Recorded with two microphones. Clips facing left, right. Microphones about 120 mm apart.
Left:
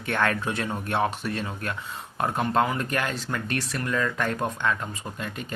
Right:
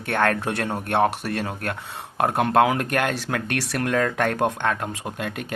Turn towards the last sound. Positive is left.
turn(degrees=-65)  # may be behind; listen again after turning